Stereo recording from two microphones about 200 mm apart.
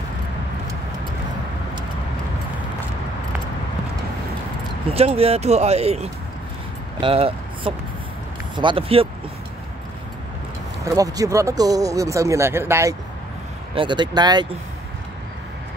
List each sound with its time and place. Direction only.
4.8 s speech: 30° right (ahead or behind)
10.8 s speech: 15° right (ahead or behind)